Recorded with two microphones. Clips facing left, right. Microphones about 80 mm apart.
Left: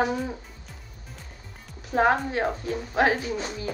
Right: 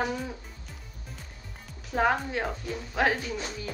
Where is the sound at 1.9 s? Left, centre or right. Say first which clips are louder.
Left 4 dB; left.